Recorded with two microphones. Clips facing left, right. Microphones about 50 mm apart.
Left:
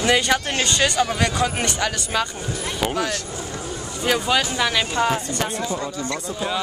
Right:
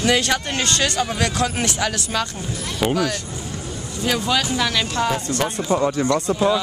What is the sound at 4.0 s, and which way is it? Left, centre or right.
Speech, centre.